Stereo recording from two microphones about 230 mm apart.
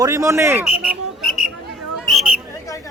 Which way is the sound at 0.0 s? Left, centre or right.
Centre.